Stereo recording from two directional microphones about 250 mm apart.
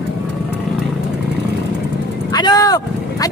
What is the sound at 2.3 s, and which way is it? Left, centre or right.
Vehicle, centre.